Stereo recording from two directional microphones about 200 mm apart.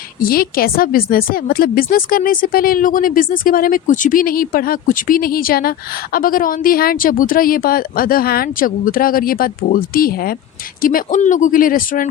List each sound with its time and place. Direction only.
0.2 s a woman's voice: 45° left (ahead or behind)